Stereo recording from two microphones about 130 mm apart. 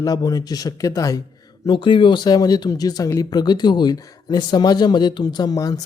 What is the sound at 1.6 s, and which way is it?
Speech, 40° left (ahead or behind).